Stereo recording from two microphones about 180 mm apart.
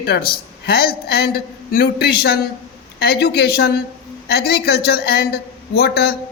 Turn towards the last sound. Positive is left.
turn(degrees=60)  # may be behind; listen again after turning